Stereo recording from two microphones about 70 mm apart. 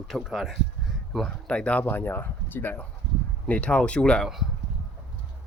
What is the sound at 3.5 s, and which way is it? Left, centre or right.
Speech, centre.